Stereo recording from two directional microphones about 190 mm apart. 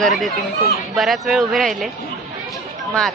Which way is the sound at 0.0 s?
Centre (ahead or behind).